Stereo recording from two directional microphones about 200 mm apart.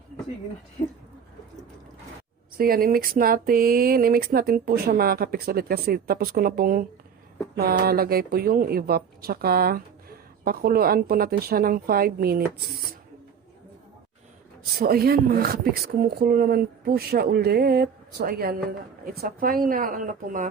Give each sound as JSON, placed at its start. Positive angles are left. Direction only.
{"t": 2.6, "sound": "speech", "side_deg": -45}
{"t": 14.8, "sound": "speech", "side_deg": -50}